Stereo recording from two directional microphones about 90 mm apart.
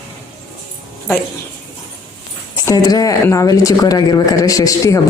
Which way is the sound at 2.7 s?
45° left (ahead or behind).